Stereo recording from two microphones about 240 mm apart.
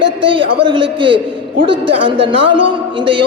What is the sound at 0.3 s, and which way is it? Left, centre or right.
A man's voice, right.